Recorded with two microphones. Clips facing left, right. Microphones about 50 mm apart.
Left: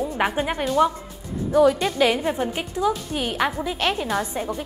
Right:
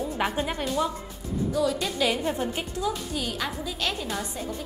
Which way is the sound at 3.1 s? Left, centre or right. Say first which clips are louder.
Left 7 dB; left.